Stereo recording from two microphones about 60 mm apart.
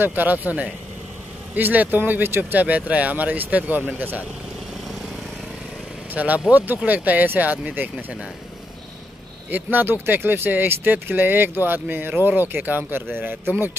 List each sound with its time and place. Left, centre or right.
0.0 s speech: right
6.1 s speech: right
9.5 s speech: right